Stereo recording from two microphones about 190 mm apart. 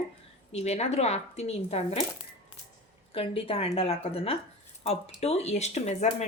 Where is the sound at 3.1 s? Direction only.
30° left (ahead or behind).